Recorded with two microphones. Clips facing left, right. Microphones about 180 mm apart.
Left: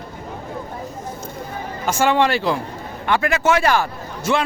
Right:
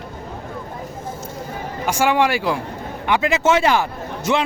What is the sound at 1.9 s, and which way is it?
Speech, 10° right (ahead or behind).